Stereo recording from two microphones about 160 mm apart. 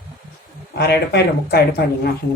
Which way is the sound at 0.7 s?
90° left.